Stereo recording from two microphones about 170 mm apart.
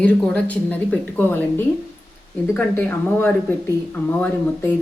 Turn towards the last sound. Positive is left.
turn(degrees=10)  # may be behind; listen again after turning